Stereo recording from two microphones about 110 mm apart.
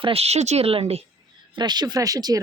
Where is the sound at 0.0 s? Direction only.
65° right (ahead or behind).